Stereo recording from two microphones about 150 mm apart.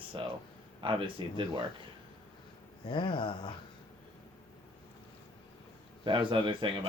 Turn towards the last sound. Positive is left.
turn(degrees=-35)  # may be behind; listen again after turning